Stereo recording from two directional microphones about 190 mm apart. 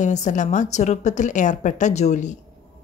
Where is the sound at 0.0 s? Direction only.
40° left (ahead or behind).